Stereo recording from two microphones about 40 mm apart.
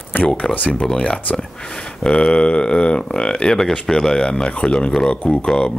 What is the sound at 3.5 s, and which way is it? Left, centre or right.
Speech, centre.